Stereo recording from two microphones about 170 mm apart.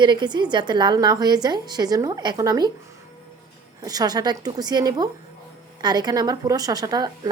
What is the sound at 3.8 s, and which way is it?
A woman's voice, 20° right (ahead or behind).